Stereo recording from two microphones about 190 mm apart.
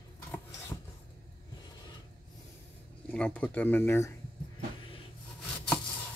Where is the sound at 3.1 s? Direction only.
5° left (ahead or behind).